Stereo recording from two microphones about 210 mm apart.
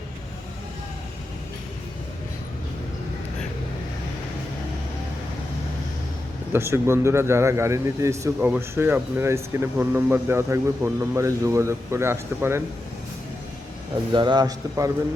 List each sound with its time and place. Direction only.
6.5 s speech: 10° right (ahead or behind)
14.1 s a man's voice: 20° right (ahead or behind)